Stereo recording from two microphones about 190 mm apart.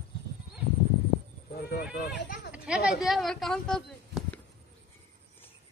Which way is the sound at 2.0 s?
60° left (ahead or behind).